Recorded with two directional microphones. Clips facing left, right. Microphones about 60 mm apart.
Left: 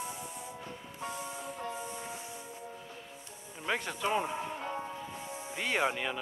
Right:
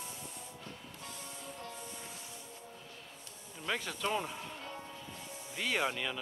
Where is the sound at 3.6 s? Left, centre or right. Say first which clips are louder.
Left 3 dB; centre.